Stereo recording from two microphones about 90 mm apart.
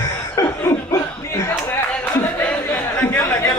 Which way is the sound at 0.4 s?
35° left (ahead or behind).